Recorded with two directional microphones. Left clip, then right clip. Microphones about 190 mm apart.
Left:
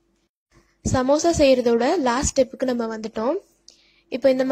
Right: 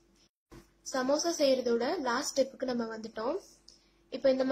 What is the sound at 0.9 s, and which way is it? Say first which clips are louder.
A woman's voice: left 11 dB; 35° left (ahead or behind).